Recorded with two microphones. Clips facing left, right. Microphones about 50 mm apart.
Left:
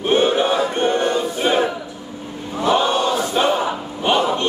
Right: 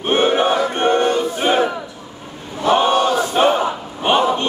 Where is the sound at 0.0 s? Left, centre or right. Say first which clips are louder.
Right 1 dB; right.